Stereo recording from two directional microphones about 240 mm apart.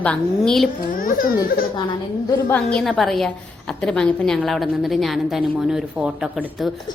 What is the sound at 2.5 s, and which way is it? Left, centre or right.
A woman's voice, centre.